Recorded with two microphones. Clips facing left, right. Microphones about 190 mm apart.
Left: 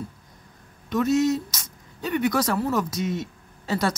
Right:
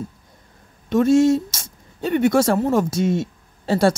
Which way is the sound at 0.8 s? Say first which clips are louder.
Right 6 dB; 30° right (ahead or behind).